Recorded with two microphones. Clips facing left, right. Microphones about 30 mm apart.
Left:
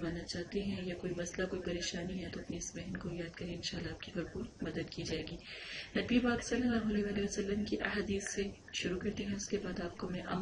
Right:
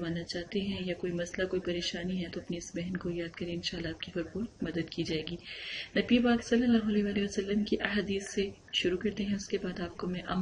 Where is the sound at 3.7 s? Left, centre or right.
Right.